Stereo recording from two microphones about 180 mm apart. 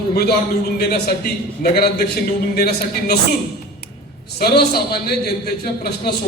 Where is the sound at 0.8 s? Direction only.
65° left (ahead or behind).